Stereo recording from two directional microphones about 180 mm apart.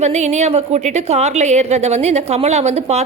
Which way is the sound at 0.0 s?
40° right (ahead or behind).